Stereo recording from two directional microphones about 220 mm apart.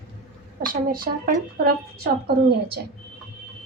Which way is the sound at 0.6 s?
40° right (ahead or behind).